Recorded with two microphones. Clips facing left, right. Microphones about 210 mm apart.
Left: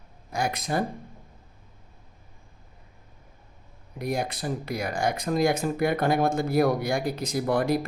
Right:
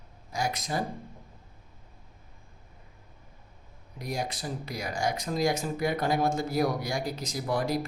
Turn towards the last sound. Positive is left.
turn(degrees=55)  # may be behind; listen again after turning